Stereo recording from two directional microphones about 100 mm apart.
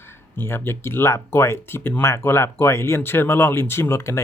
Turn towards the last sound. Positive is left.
turn(degrees=25)  # may be behind; listen again after turning